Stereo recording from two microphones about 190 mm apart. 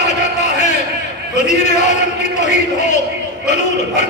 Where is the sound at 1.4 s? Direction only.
40° left (ahead or behind).